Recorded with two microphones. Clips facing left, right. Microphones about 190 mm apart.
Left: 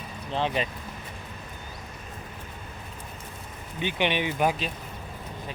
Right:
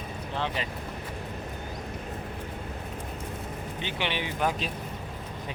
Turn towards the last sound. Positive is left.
turn(degrees=15)  # may be behind; listen again after turning